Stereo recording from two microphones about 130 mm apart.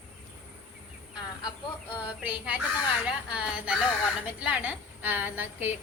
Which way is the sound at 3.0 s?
5° right (ahead or behind).